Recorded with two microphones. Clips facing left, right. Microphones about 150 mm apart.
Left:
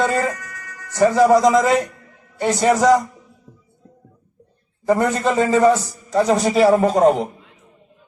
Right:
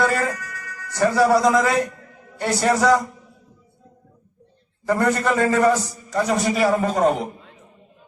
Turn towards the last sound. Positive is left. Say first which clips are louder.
# left 5 dB
turn(degrees=30)  # may be behind; listen again after turning